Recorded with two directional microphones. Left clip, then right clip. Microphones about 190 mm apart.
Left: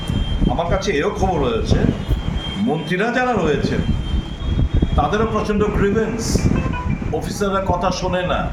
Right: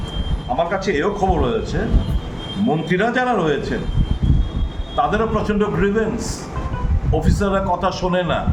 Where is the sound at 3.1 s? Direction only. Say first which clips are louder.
Left 1 dB; 25° right (ahead or behind).